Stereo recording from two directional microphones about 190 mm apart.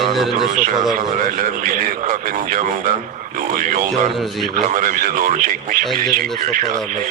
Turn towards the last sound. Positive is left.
turn(degrees=-45)  # may be behind; listen again after turning